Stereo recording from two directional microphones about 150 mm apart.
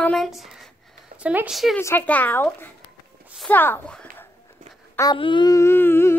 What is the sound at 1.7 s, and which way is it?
Speech, 15° left (ahead or behind).